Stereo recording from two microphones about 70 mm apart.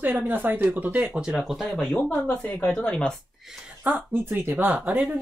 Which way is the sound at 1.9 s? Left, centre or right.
Left.